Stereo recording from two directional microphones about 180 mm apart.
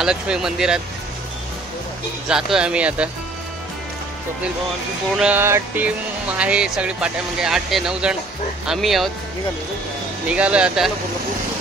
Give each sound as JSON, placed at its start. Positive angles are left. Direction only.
{"t": 0.0, "sound": "speech", "side_deg": -5}
{"t": 2.2, "sound": "speech", "side_deg": -5}
{"t": 5.1, "sound": "music", "side_deg": -5}
{"t": 6.3, "sound": "speech", "side_deg": -5}
{"t": 10.2, "sound": "music", "side_deg": -5}